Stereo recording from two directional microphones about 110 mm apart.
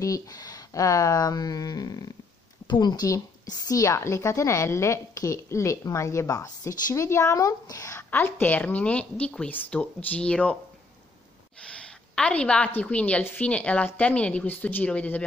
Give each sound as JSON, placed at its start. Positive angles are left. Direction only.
{"t": 0.0, "sound": "a woman's voice", "side_deg": 35}
{"t": 8.1, "sound": "a woman's voice", "side_deg": 15}
{"t": 11.6, "sound": "a woman's voice", "side_deg": 10}